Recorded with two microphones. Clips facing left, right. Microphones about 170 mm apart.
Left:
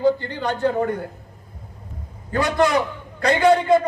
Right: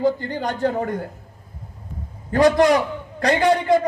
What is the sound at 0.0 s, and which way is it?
Speech, 45° right (ahead or behind).